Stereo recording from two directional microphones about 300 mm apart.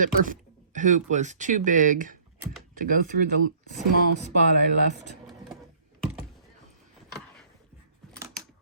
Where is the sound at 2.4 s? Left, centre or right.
Centre.